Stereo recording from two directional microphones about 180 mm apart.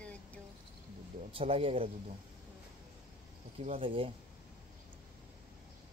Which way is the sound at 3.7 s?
30° right (ahead or behind).